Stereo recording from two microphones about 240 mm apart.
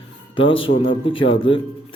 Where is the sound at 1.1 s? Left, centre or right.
Left.